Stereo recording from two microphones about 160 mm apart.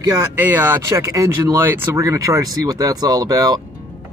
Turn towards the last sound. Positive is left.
turn(degrees=-25)  # may be behind; listen again after turning